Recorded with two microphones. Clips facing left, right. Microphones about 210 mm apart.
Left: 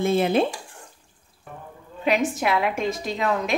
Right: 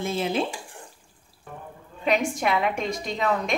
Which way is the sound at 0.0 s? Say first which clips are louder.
Left 6 dB; 55° left (ahead or behind).